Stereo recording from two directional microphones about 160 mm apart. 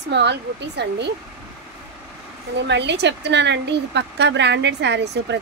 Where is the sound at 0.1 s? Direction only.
90° right.